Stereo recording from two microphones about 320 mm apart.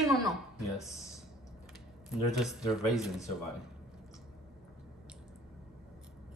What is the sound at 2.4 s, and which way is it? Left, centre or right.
Speech, centre.